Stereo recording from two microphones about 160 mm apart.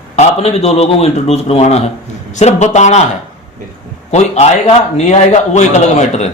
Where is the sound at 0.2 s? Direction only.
40° left (ahead or behind).